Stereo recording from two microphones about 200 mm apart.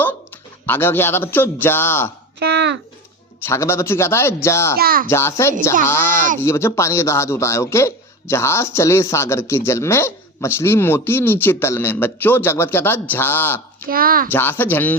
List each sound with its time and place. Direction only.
0.6 s speech: 10° left (ahead or behind)
2.4 s speech: 60° right (ahead or behind)
3.4 s speech: 15° left (ahead or behind)
4.8 s a woman's voice: 50° right (ahead or behind)
5.0 s speech: 15° left (ahead or behind)
13.9 s a woman's voice: 45° right (ahead or behind)
14.3 s speech: 10° left (ahead or behind)